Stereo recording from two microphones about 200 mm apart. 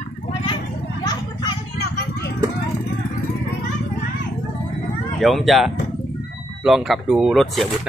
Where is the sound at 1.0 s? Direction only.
20° left (ahead or behind).